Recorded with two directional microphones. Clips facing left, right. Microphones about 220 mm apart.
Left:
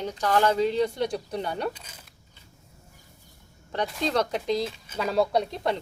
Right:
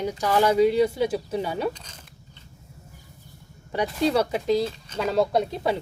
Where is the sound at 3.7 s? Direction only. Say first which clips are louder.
Right 4 dB; 10° right (ahead or behind).